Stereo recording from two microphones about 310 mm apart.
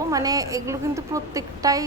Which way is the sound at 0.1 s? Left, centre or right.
Centre.